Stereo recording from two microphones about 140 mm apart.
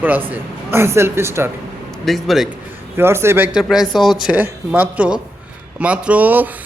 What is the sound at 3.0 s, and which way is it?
Speech, 20° right (ahead or behind).